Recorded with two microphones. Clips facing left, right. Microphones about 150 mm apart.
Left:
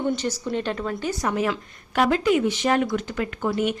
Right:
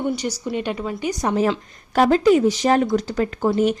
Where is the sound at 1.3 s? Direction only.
35° right (ahead or behind).